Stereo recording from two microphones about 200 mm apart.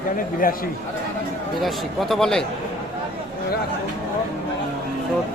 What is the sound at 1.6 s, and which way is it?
Speech, centre (ahead or behind).